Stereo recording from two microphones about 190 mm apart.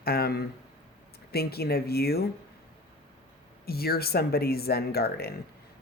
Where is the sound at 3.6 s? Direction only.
55° left (ahead or behind).